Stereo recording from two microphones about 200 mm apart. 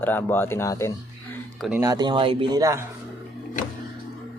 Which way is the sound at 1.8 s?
20° right (ahead or behind).